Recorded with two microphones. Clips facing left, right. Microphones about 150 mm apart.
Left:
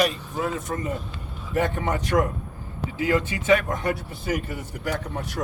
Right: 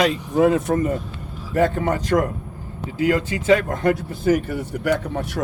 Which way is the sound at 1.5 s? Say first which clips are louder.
Right 5 dB; 45° right (ahead or behind).